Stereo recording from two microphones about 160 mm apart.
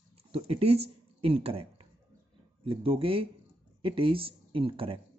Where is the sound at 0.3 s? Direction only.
35° right (ahead or behind).